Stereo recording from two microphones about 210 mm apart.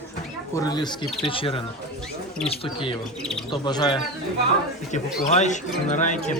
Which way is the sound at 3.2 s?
5° left (ahead or behind).